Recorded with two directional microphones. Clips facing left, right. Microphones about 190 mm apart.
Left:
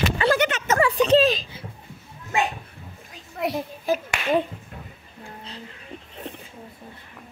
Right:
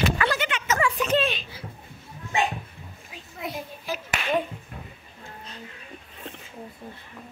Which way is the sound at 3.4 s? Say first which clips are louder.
Left 7 dB; 70° left (ahead or behind).